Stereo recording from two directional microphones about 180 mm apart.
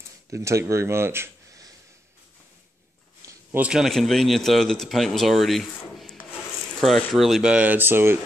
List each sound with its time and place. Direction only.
0.3 s speech: 15° right (ahead or behind)
3.3 s a man's voice: 10° right (ahead or behind)